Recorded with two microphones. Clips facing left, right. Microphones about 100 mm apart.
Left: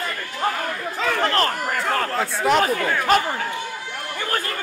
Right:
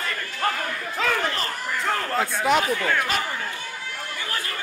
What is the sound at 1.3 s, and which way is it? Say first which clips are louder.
Chatter: left 7 dB; 60° left (ahead or behind).